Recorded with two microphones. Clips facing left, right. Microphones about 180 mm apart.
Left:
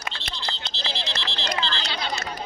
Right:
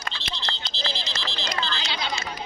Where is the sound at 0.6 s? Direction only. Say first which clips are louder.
Even; 60° left (ahead or behind).